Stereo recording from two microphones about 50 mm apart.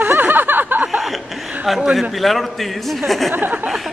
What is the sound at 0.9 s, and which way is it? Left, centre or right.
Chuckle, centre.